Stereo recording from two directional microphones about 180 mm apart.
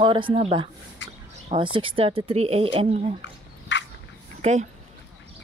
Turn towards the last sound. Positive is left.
turn(degrees=-40)  # may be behind; listen again after turning